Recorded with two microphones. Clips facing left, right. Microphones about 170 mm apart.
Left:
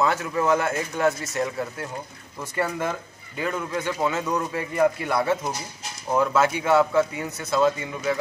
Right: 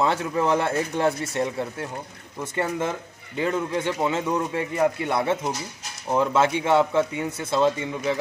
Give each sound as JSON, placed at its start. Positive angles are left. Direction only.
{"t": 0.0, "sound": "speech", "side_deg": -30}